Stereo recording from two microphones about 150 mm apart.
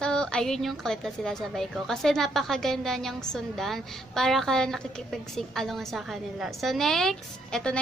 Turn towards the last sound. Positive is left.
turn(degrees=5)  # may be behind; listen again after turning